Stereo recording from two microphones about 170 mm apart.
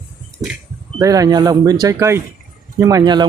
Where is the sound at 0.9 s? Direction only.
20° right (ahead or behind).